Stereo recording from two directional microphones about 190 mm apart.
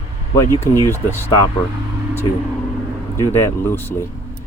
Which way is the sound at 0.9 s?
15° right (ahead or behind).